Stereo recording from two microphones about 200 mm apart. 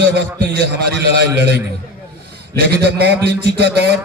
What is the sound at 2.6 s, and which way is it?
A man's voice, 55° right (ahead or behind).